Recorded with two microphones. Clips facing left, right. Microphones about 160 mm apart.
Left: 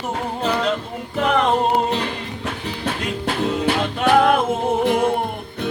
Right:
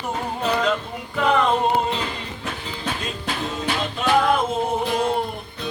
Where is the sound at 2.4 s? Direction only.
70° left (ahead or behind).